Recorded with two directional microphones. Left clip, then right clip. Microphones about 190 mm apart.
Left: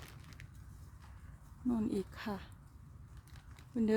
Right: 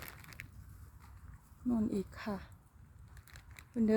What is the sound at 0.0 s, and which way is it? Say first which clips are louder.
Crushing: right 6 dB; 45° right (ahead or behind).